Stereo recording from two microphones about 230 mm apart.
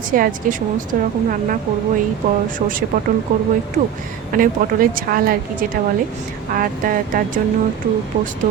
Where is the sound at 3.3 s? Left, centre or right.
Right.